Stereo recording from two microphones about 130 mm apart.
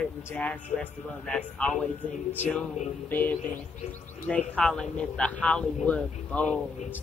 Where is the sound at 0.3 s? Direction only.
10° left (ahead or behind).